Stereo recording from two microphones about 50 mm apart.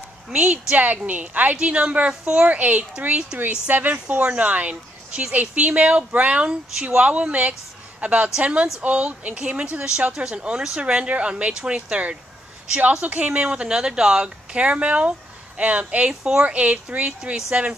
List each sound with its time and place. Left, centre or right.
0.3 s speech: right
3.6 s speech: right
13.5 s speech: centre
16.1 s speech: centre
16.4 s speech: right